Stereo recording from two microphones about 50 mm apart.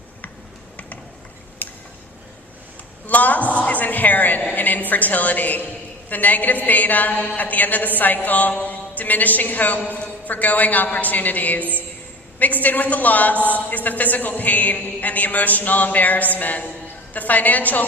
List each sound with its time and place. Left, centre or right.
1.6 s tick-tock: left
3.1 s a man's voice: left